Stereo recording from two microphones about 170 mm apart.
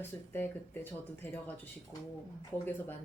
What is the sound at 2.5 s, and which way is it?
Speech, 10° left (ahead or behind).